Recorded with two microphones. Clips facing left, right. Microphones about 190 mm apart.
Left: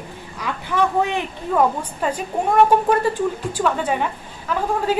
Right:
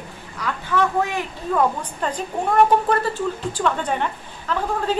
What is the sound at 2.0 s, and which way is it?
A woman's voice, 10° left (ahead or behind).